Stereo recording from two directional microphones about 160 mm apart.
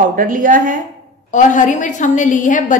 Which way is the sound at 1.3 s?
55° left (ahead or behind).